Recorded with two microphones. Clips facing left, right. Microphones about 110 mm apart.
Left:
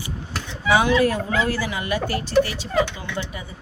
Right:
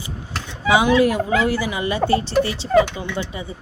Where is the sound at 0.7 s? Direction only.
15° right (ahead or behind).